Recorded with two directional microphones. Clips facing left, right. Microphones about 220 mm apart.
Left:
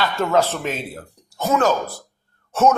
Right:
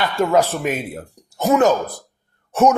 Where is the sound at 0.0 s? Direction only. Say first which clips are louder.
Right 2 dB; 15° right (ahead or behind).